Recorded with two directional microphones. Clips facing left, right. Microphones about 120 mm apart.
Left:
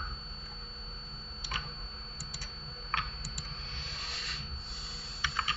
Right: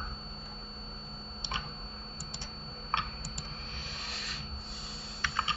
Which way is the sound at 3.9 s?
Centre (ahead or behind).